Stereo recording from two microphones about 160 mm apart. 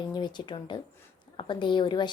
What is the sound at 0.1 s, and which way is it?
Speech, 30° left (ahead or behind).